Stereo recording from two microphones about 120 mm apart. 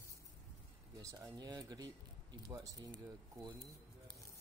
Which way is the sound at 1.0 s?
25° right (ahead or behind).